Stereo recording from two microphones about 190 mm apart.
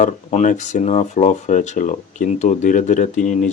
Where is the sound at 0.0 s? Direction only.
40° left (ahead or behind).